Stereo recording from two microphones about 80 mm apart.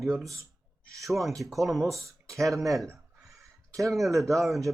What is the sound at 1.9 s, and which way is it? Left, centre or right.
Speech, right.